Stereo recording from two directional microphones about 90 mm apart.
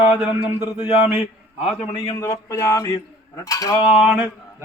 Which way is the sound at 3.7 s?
75° left (ahead or behind).